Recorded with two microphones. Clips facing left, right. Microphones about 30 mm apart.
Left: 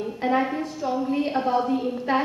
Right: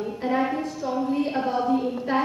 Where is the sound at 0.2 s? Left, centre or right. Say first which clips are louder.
Left 1 dB; left.